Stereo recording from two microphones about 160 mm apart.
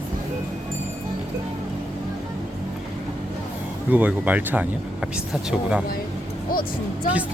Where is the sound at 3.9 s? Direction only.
10° right (ahead or behind).